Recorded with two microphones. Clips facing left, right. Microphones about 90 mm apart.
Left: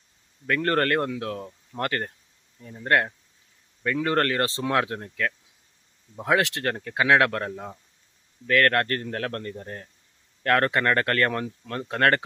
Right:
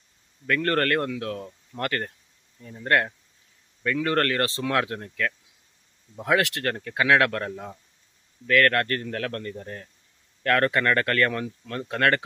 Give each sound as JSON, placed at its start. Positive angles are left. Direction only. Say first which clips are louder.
{"t": 0.4, "sound": "speech", "louder": "even", "side_deg": 25}
{"t": 2.6, "sound": "speech", "louder": "even", "side_deg": 10}